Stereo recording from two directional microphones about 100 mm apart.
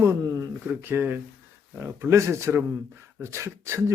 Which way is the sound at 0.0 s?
30° right (ahead or behind).